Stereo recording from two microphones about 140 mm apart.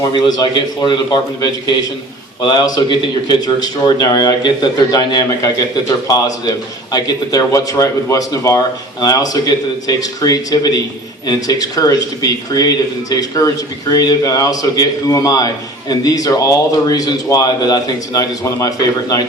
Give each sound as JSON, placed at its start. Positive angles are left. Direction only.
{"t": 0.0, "sound": "a man's voice", "side_deg": 30}